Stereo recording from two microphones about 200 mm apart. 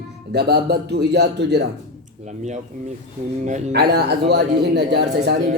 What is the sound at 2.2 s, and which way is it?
Speech, 35° right (ahead or behind).